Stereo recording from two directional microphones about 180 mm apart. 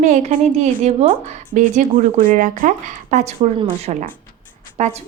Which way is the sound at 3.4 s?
30° right (ahead or behind).